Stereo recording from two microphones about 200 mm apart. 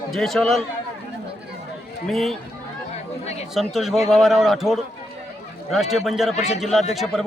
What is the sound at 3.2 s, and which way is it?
Speech, 35° left (ahead or behind).